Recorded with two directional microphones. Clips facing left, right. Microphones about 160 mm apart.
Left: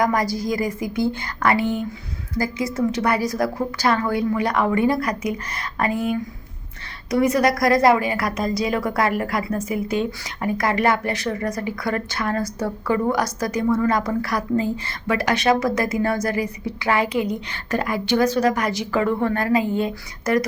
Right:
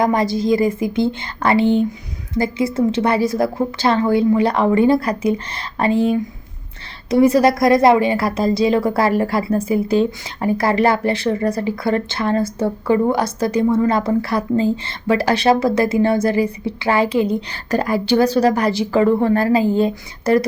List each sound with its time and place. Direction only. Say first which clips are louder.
0.0 s a woman's voice: right 4 dB; 25° right (ahead or behind)